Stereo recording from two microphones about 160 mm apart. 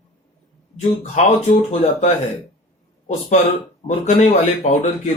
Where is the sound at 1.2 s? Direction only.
45° left (ahead or behind).